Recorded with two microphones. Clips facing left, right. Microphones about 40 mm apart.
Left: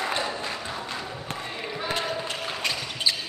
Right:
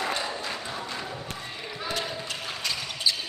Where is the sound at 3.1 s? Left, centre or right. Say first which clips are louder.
Left 1 dB; left.